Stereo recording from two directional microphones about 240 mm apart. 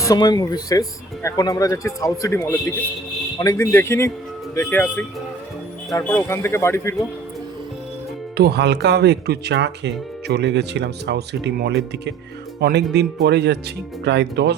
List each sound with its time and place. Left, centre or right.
0.0 s speech: centre
8.4 s speech: right